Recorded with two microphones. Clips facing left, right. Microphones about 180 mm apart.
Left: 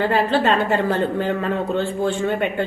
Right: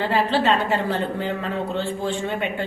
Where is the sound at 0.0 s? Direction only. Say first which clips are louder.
Left 2 dB; 50° left (ahead or behind).